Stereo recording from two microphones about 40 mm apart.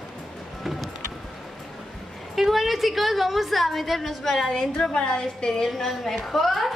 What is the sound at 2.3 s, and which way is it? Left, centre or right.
A woman's voice, centre.